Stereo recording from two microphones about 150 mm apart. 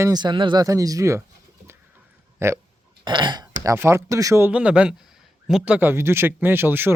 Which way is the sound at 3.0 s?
30° right (ahead or behind).